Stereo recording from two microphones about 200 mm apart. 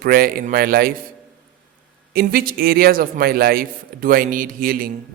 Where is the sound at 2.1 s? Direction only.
45° right (ahead or behind).